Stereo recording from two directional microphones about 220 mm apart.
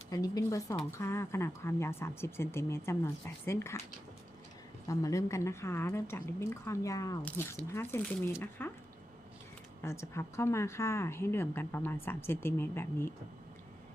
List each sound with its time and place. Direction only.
0.1 s a woman's voice: 15° left (ahead or behind)
4.9 s a woman's voice: 15° left (ahead or behind)
9.8 s a woman's voice: 10° left (ahead or behind)